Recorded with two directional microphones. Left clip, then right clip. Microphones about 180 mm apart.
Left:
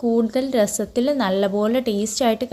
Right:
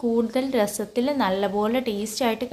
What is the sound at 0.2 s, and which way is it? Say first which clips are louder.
A woman's voice: left 3 dB; 20° left (ahead or behind).